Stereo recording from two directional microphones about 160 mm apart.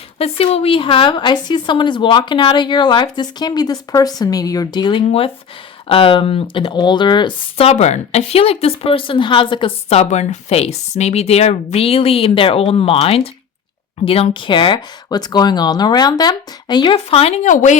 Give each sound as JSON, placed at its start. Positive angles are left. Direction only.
{"t": 0.2, "sound": "speech", "side_deg": 40}
{"t": 7.7, "sound": "speech", "side_deg": 45}
{"t": 17.5, "sound": "speech", "side_deg": 55}